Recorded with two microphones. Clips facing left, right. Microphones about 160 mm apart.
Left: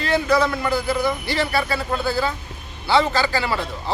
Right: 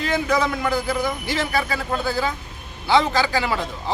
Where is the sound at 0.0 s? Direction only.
15° right (ahead or behind).